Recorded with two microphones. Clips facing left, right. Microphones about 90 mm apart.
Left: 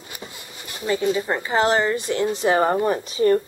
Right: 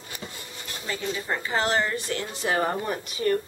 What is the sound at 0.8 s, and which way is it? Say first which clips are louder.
A woman's voice: left 9 dB; 20° left (ahead or behind).